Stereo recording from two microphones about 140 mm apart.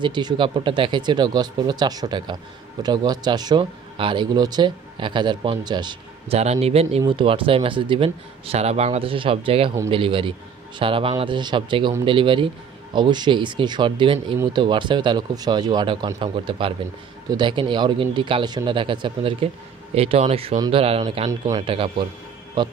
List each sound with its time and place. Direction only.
0.0 s speech: 30° right (ahead or behind)
6.2 s a man's voice: 50° right (ahead or behind)
7.0 s a man's voice: 35° right (ahead or behind)
21.3 s speech: 25° right (ahead or behind)
21.6 s speech: 40° right (ahead or behind)